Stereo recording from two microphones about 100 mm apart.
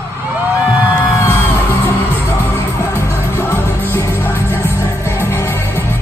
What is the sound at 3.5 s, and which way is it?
Music, 25° left (ahead or behind).